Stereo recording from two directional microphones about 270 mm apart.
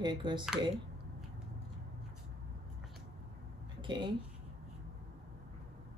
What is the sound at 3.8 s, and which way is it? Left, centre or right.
Speech, centre.